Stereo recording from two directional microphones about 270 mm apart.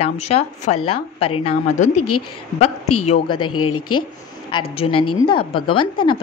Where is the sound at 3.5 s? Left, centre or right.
Left.